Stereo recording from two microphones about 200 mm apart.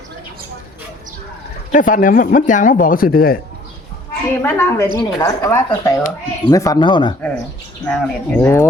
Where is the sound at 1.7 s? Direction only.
40° left (ahead or behind).